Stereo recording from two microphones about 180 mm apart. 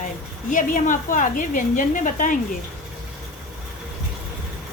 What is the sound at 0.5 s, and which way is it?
A woman's voice, 45° left (ahead or behind).